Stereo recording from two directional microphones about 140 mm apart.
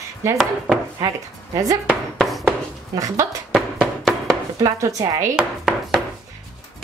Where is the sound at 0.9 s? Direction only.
25° right (ahead or behind).